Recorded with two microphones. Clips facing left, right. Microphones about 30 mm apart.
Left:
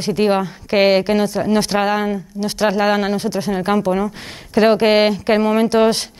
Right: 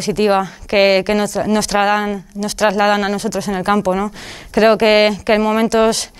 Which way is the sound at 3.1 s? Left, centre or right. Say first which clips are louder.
Even; right.